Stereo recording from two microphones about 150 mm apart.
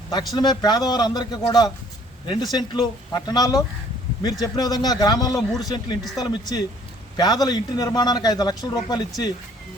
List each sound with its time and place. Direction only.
0.1 s a man's voice: 25° left (ahead or behind)